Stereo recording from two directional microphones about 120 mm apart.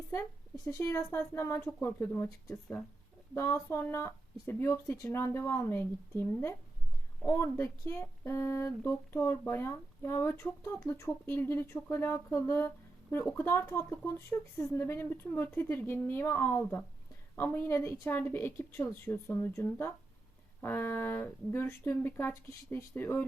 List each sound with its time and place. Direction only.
0.1 s speech: 25° left (ahead or behind)